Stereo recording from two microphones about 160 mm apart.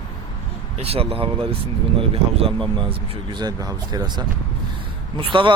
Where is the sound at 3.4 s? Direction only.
25° right (ahead or behind).